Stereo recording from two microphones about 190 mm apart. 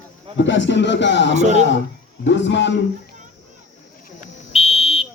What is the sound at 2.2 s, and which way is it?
Speech, 70° left (ahead or behind).